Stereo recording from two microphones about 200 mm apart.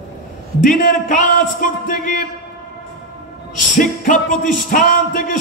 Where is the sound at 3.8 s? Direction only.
40° left (ahead or behind).